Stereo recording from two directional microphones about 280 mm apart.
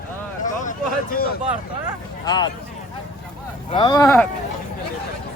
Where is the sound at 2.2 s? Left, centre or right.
Centre.